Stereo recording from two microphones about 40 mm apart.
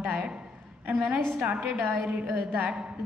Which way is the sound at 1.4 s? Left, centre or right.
Right.